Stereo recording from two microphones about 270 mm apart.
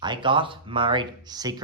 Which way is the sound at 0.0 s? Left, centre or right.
Centre.